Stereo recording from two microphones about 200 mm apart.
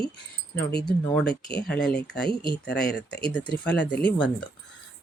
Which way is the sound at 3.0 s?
60° left (ahead or behind).